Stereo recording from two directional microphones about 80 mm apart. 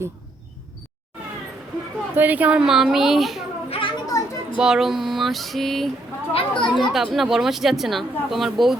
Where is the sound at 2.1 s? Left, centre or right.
Right; by 3.4 s centre.